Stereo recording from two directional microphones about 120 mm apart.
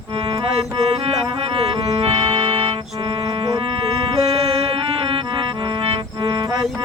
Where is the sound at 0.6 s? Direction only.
55° right (ahead or behind).